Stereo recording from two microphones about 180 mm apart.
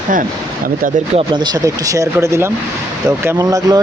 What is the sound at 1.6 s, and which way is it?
Speech, 20° right (ahead or behind).